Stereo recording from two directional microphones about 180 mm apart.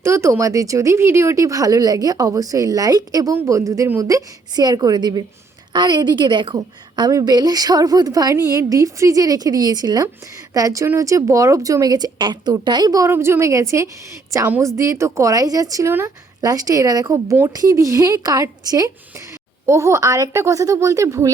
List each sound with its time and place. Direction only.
0.0 s speech: 15° right (ahead or behind)